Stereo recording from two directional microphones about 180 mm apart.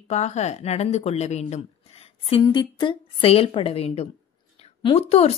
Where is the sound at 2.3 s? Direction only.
25° left (ahead or behind).